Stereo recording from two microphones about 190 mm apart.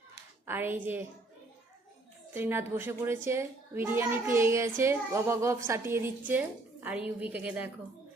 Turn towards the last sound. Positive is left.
turn(degrees=-5)  # may be behind; listen again after turning